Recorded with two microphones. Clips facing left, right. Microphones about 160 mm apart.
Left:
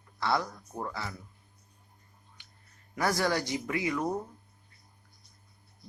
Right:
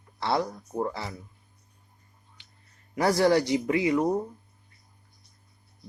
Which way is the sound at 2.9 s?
25° right (ahead or behind).